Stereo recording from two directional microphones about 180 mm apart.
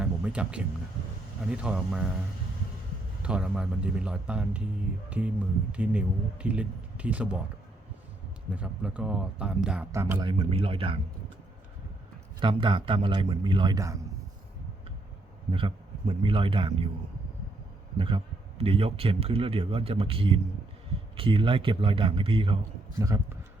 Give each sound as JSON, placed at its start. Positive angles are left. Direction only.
{"t": 0.0, "sound": "music", "side_deg": -5}
{"t": 1.5, "sound": "a man's voice", "side_deg": -5}
{"t": 3.2, "sound": "a man's voice", "side_deg": -5}
{"t": 8.4, "sound": "speech", "side_deg": -5}
{"t": 9.9, "sound": "a man's voice", "side_deg": -15}
{"t": 12.4, "sound": "a man's voice", "side_deg": -25}
{"t": 15.5, "sound": "a man's voice", "side_deg": -30}
{"t": 17.9, "sound": "a man's voice", "side_deg": -30}